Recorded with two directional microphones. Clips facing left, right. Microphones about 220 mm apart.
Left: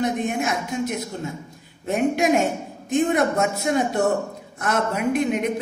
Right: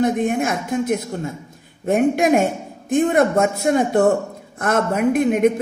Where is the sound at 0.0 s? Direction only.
50° right (ahead or behind).